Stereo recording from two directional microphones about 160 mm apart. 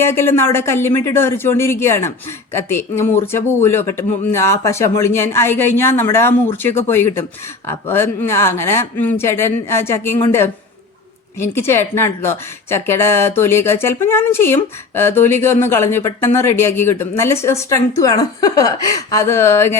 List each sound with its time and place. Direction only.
0.0 s a woman's voice: 15° left (ahead or behind)